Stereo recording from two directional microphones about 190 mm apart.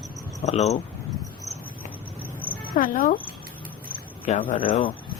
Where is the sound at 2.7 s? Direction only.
45° left (ahead or behind).